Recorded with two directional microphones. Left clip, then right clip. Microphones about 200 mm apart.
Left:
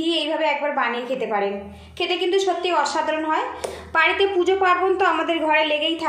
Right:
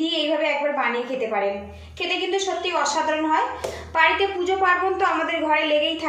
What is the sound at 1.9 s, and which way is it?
Speech, 45° left (ahead or behind).